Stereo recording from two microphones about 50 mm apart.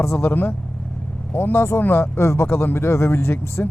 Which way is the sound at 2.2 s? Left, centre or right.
Left.